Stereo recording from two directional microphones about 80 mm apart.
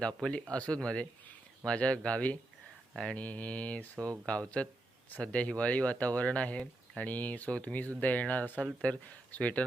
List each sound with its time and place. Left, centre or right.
0.0 s speech: centre